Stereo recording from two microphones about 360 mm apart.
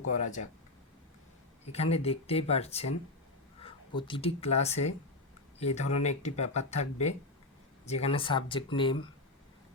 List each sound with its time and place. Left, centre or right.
0.1 s speech: centre
1.6 s speech: centre